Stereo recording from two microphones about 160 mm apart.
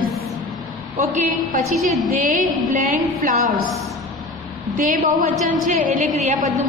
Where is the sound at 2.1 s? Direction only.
55° right (ahead or behind).